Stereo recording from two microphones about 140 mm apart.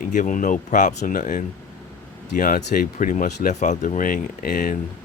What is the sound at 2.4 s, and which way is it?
Speech, 85° left.